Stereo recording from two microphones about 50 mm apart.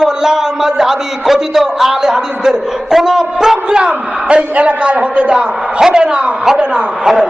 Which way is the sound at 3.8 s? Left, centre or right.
Right.